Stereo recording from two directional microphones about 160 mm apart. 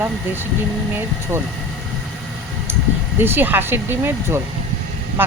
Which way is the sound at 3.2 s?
15° right (ahead or behind).